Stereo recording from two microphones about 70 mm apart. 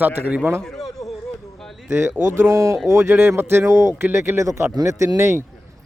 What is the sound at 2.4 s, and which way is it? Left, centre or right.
Speech, right.